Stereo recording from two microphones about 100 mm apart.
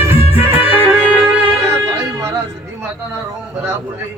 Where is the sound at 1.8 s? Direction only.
30° right (ahead or behind).